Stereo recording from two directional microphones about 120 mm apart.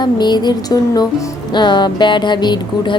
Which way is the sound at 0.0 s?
35° left (ahead or behind).